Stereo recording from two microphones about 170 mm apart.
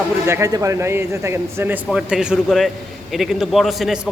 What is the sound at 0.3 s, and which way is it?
A man's voice, 15° right (ahead or behind).